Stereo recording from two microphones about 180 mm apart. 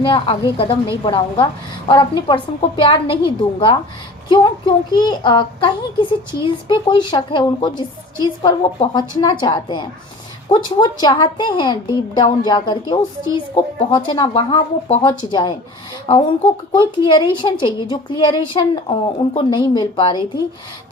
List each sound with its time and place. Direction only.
0.0 s a woman's voice: 25° left (ahead or behind)